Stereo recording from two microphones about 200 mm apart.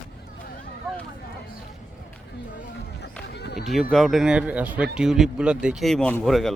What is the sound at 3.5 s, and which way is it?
Speech, centre (ahead or behind).